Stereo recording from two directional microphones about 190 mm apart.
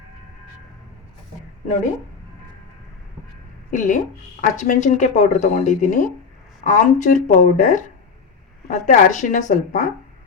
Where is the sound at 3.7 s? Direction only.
40° left (ahead or behind).